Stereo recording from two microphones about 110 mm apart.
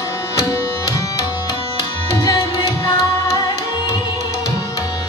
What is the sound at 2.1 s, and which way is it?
Tabla, 30° left (ahead or behind).